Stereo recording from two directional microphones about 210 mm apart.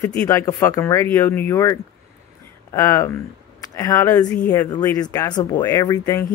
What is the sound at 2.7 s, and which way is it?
Speech, 10° left (ahead or behind).